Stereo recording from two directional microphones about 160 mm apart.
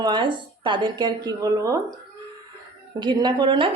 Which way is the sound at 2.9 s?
30° right (ahead or behind).